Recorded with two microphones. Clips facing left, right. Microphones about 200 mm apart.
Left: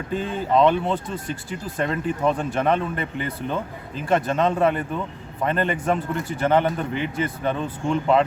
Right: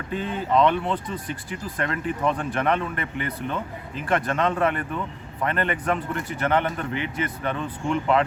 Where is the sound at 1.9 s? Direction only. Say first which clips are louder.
Left 2 dB; 30° left (ahead or behind).